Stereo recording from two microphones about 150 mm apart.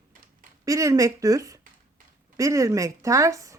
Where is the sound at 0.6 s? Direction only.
20° right (ahead or behind).